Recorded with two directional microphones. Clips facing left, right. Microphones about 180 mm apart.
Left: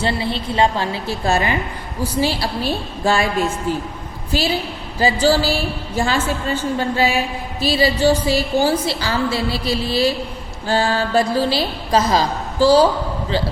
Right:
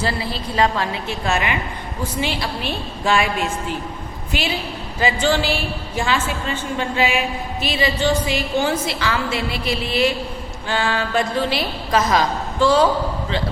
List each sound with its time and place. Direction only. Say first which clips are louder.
0.0 s a woman's voice: left 3 dB; 25° left (ahead or behind)
4.3 s a woman's voice: left 4 dB; 35° left (ahead or behind)